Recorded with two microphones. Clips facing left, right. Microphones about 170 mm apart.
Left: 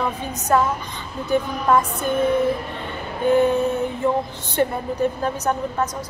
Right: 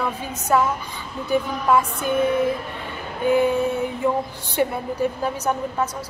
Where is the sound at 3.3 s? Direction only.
10° right (ahead or behind).